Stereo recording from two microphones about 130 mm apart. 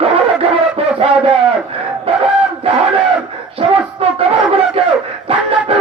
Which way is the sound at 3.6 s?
50° right (ahead or behind).